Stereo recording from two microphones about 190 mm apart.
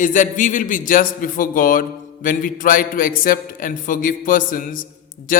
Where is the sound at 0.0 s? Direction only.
45° left (ahead or behind).